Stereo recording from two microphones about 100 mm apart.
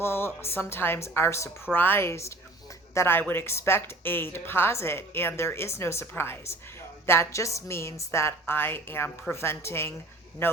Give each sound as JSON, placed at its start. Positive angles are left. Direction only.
{"t": 0.0, "sound": "a woman's voice", "side_deg": 25}